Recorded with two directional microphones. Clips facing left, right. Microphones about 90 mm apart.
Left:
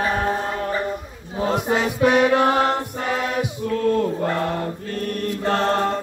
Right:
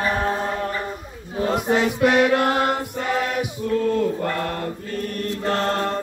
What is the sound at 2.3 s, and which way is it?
Mantra, 30° left (ahead or behind).